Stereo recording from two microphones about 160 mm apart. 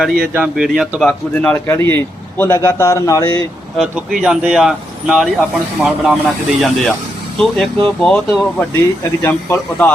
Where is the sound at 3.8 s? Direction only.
5° right (ahead or behind).